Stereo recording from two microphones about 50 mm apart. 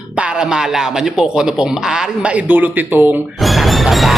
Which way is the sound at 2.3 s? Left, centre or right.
Right.